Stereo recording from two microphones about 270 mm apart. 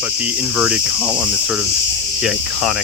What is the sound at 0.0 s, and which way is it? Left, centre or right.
Cricket, centre.